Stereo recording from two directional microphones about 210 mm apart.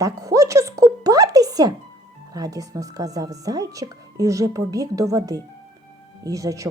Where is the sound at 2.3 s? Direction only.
15° right (ahead or behind).